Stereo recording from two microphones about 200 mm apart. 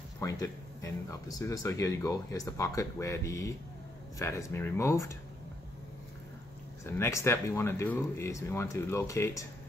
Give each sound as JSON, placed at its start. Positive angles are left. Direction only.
{"t": 0.2, "sound": "speech", "side_deg": 15}
{"t": 6.8, "sound": "speech", "side_deg": 15}